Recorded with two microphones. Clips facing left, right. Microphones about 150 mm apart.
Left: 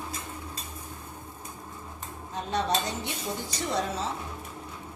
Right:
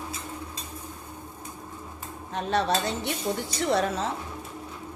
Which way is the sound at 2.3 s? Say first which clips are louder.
Right 4 dB; 70° right (ahead or behind).